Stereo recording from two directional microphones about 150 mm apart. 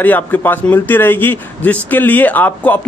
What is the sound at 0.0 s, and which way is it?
Speech, 10° left (ahead or behind).